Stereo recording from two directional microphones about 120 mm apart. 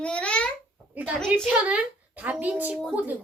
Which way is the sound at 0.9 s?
15° right (ahead or behind).